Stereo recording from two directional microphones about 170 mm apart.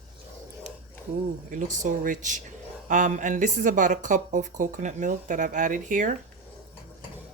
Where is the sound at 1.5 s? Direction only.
50° right (ahead or behind).